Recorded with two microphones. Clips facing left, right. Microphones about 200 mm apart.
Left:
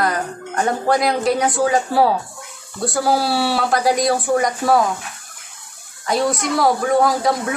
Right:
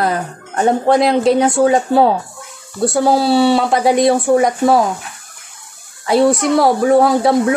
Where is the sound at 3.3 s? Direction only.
20° right (ahead or behind).